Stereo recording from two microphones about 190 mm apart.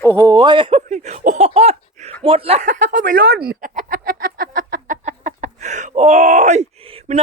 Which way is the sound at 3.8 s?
50° right (ahead or behind).